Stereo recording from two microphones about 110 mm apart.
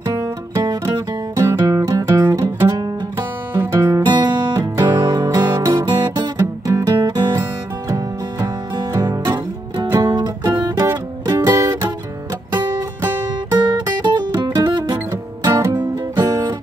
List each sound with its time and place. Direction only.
0.0 s music: 35° right (ahead or behind)
3.2 s music: 20° right (ahead or behind)
3.9 s music: 40° right (ahead or behind)
5.9 s guitar: 35° right (ahead or behind)
7.0 s music: 40° right (ahead or behind)
13.6 s music: 40° right (ahead or behind)
15.4 s music: 30° right (ahead or behind)